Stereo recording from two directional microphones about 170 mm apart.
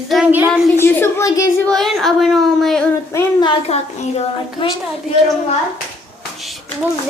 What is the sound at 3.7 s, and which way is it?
Speech, 40° left (ahead or behind).